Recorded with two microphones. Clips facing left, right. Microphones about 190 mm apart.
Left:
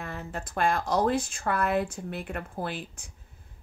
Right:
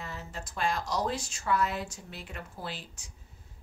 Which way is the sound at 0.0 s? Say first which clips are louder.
Left 5 dB; 55° left (ahead or behind).